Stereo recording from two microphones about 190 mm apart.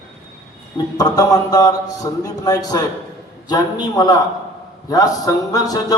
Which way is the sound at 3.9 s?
20° left (ahead or behind).